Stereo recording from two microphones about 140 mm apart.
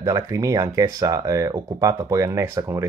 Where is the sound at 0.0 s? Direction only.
20° right (ahead or behind).